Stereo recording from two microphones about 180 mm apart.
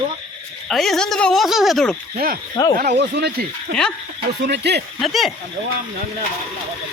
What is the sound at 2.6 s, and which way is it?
Speech, 20° left (ahead or behind).